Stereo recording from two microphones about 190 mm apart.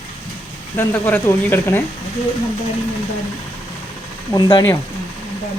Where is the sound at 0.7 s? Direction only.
10° left (ahead or behind).